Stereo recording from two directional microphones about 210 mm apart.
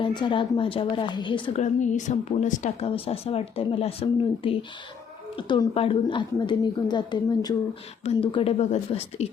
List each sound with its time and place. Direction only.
0.0 s a woman's voice: 20° left (ahead or behind)
1.6 s a woman's voice: 35° left (ahead or behind)